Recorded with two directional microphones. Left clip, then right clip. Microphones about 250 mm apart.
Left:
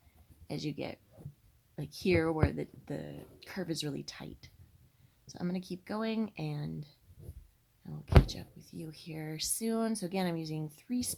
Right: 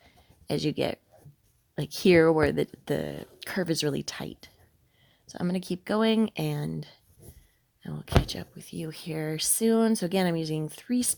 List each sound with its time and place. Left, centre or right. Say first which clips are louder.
0.4 s speech: right 11 dB; right
8.3 s speech: right 8 dB; right